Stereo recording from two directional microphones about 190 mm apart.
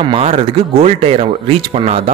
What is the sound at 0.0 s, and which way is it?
Speech, 30° right (ahead or behind).